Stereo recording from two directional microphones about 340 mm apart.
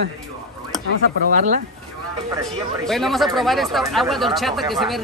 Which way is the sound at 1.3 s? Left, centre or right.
Right.